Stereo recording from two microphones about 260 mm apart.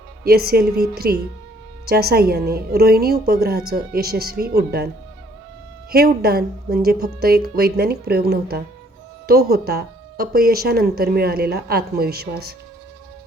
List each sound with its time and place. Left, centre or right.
0.3 s speech: right
5.9 s speech: right